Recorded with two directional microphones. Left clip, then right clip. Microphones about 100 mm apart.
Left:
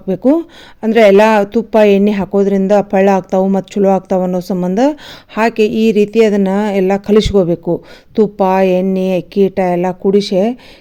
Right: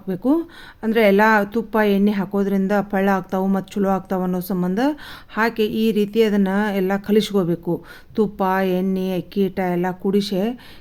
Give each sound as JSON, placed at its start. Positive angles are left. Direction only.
{"t": 0.3, "sound": "speech", "side_deg": 60}